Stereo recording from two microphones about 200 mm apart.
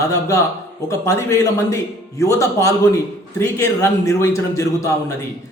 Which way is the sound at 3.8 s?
15° left (ahead or behind).